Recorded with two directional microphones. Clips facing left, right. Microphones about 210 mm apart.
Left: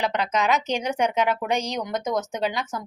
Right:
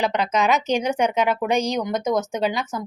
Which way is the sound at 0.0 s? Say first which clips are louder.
Right 3 dB; 15° right (ahead or behind).